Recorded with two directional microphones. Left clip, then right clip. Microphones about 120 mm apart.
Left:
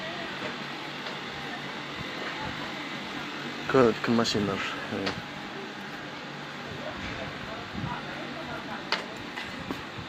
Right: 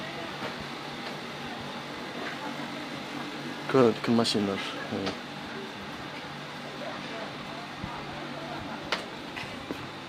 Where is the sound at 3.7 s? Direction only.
25° right (ahead or behind).